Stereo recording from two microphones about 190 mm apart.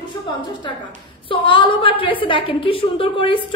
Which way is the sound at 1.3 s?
25° left (ahead or behind).